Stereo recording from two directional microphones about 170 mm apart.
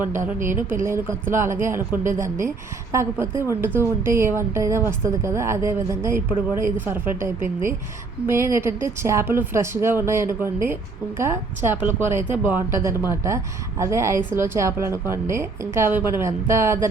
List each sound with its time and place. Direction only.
0.0 s a woman's voice: 15° right (ahead or behind)